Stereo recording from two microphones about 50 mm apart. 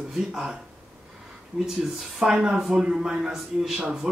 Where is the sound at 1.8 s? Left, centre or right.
Centre.